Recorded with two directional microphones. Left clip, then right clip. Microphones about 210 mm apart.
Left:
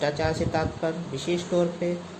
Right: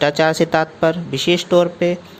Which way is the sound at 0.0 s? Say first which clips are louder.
Right 11 dB; 35° right (ahead or behind).